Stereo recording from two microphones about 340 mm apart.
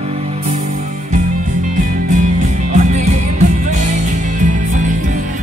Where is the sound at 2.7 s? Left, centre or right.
Right.